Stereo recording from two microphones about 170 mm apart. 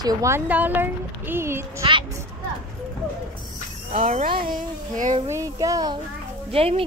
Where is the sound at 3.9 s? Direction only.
50° right (ahead or behind).